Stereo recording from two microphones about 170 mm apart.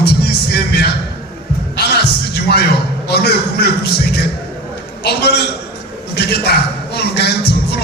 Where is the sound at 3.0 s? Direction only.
75° left (ahead or behind).